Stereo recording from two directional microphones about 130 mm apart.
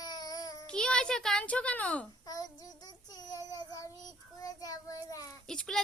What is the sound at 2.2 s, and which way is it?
Child singing, 30° left (ahead or behind).